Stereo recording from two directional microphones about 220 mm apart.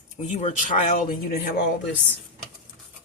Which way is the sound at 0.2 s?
35° left (ahead or behind).